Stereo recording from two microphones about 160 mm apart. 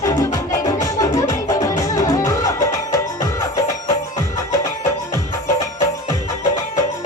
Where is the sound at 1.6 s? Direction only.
20° left (ahead or behind).